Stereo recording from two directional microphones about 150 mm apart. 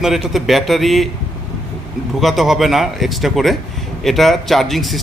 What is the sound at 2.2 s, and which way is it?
A man's voice, centre (ahead or behind).